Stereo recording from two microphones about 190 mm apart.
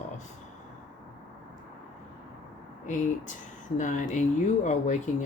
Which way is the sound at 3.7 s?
40° left (ahead or behind).